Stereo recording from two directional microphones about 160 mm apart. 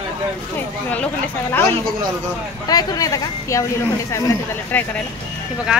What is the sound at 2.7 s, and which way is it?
Speech, 25° left (ahead or behind).